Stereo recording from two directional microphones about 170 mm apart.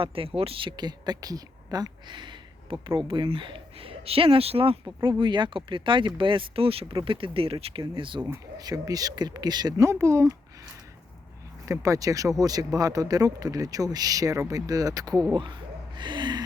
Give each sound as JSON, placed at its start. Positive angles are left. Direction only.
{"t": 0.0, "sound": "speech", "side_deg": -35}
{"t": 4.9, "sound": "speech", "side_deg": -25}
{"t": 11.6, "sound": "speech", "side_deg": -20}
{"t": 16.0, "sound": "gasp", "side_deg": -25}